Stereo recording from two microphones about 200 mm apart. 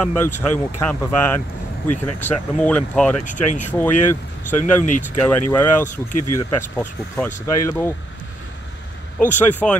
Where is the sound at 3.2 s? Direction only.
40° left (ahead or behind).